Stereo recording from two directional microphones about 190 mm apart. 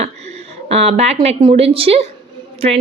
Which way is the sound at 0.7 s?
35° right (ahead or behind).